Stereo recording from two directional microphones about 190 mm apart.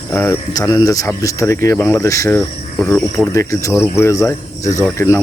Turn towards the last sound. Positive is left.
turn(degrees=15)  # may be behind; listen again after turning